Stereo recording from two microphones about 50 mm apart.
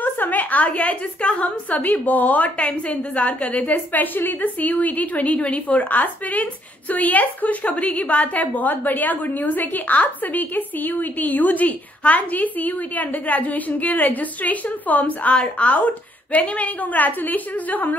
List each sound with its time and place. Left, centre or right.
0.0 s a woman's voice: left
1.8 s a woman's voice: left